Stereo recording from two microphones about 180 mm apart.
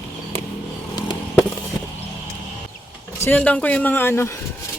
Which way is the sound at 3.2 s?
10° left (ahead or behind).